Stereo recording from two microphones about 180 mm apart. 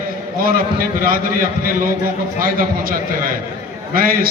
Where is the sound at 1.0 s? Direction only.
55° right (ahead or behind).